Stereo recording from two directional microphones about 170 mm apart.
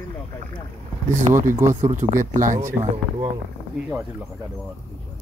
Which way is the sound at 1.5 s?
15° right (ahead or behind).